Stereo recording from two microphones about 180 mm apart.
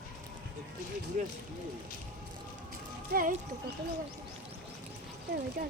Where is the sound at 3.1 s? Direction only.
50° right (ahead or behind).